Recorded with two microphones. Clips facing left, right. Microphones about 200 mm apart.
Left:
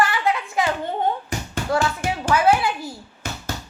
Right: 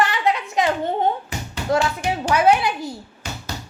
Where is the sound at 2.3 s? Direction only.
20° right (ahead or behind).